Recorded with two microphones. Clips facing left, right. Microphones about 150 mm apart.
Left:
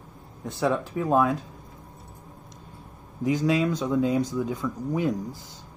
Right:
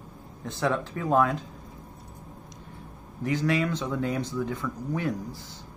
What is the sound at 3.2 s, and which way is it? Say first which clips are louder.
Speech: left 3 dB; 15° left (ahead or behind).